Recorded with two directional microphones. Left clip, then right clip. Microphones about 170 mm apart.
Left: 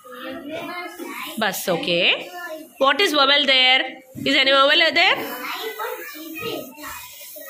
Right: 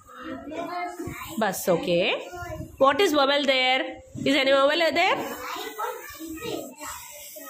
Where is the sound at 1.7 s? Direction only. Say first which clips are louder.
Left 4 dB; 20° right (ahead or behind).